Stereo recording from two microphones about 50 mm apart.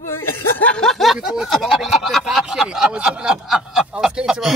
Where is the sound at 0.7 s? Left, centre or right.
Centre.